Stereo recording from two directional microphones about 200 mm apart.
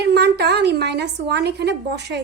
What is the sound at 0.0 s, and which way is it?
A woman's voice, 55° right (ahead or behind).